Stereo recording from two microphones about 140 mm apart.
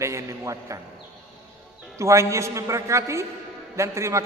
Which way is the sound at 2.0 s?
20° right (ahead or behind).